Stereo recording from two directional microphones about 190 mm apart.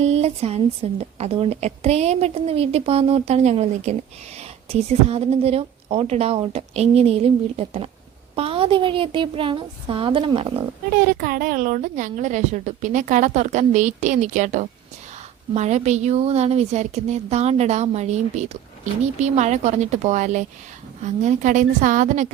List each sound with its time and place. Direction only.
0.0 s a woman's voice: 35° right (ahead or behind)
11.2 s a woman's voice: 50° right (ahead or behind)